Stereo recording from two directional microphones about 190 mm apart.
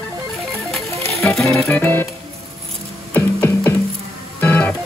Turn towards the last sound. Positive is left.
turn(degrees=10)  # may be behind; listen again after turning